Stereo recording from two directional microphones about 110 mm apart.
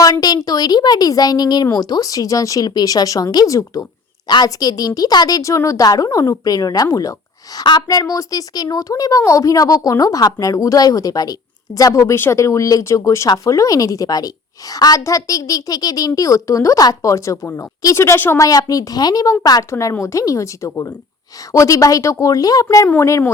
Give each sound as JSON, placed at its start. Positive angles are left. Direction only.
{"t": 0.0, "sound": "a woman's voice", "side_deg": 35}